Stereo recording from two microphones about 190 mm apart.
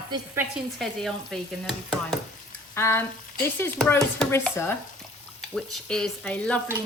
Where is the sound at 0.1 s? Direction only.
20° right (ahead or behind).